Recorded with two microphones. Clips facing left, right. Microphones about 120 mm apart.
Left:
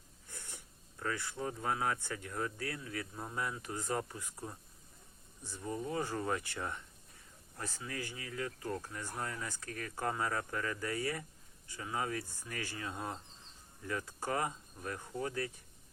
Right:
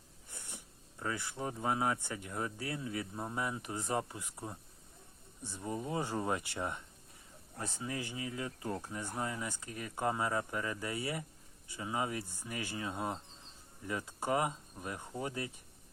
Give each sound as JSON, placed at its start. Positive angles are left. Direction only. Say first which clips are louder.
{"t": 0.3, "sound": "speech", "louder": "right 1 dB", "side_deg": -20}